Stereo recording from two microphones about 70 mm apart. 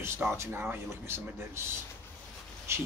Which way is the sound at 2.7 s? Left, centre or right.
Right.